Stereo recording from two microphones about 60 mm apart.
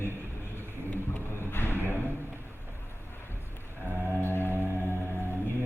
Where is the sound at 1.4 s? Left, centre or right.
Left.